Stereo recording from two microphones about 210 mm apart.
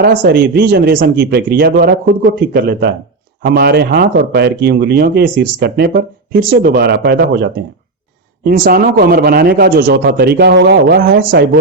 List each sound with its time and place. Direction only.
0.0 s a man's voice: 45° right (ahead or behind)